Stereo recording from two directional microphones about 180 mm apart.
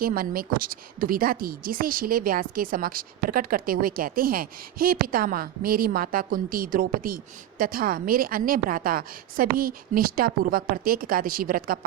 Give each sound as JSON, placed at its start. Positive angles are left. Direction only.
{"t": 0.0, "sound": "a woman's voice", "side_deg": -55}